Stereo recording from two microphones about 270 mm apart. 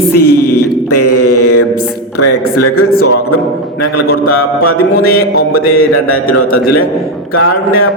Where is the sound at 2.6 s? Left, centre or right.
Left.